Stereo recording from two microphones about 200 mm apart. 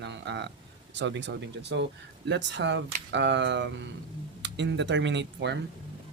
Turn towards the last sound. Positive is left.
turn(degrees=-60)  # may be behind; listen again after turning